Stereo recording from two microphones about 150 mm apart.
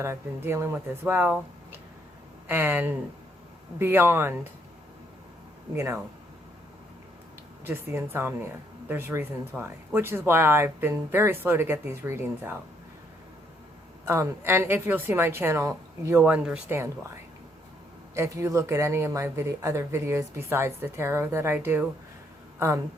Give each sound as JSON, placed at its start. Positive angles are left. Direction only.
{"t": 0.0, "sound": "speech", "side_deg": -15}
{"t": 2.5, "sound": "speech", "side_deg": -15}
{"t": 5.7, "sound": "speech", "side_deg": -20}
{"t": 7.6, "sound": "speech", "side_deg": -15}
{"t": 14.1, "sound": "speech", "side_deg": -15}
{"t": 16.2, "sound": "speech", "side_deg": -5}
{"t": 16.6, "sound": "speech", "side_deg": -15}
{"t": 18.1, "sound": "speech", "side_deg": -20}